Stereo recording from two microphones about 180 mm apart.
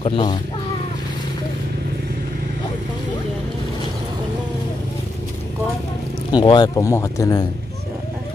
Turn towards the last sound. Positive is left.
turn(degrees=20)  # may be behind; listen again after turning